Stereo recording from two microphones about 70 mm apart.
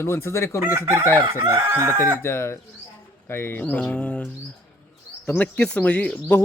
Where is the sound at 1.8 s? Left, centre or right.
Right.